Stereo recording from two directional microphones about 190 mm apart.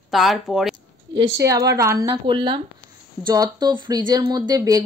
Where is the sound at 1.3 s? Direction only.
15° right (ahead or behind).